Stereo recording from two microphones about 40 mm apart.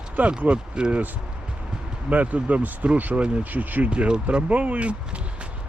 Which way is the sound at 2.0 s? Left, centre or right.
Right.